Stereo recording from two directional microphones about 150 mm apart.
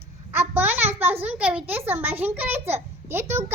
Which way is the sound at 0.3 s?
15° right (ahead or behind).